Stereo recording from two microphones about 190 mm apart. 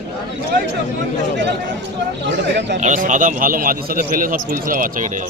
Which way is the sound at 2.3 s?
65° right (ahead or behind).